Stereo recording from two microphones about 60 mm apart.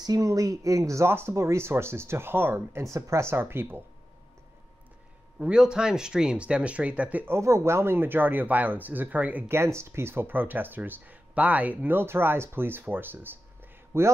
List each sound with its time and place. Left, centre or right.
0.0 s speech: right
1.0 s speech: right
2.8 s speech: right
3.3 s speech: right
5.4 s speech: centre
7.2 s speech: right
9.5 s speech: right